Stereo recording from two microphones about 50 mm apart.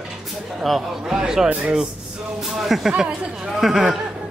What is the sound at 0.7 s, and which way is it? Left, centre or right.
Speech, centre.